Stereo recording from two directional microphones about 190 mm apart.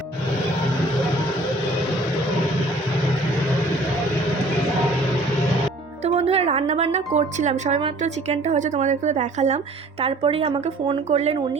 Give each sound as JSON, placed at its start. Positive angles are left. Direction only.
{"t": 6.1, "sound": "speech", "side_deg": -30}